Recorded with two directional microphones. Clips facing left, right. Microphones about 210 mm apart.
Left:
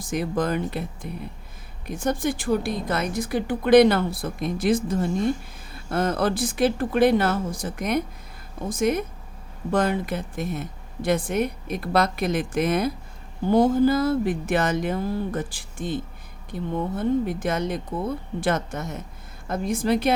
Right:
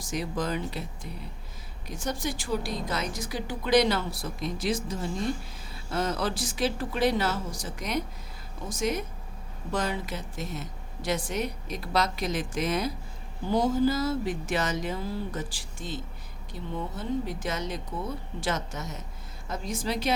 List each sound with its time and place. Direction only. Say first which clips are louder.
0.0 s a woman's voice: left 6 dB; 55° left (ahead or behind)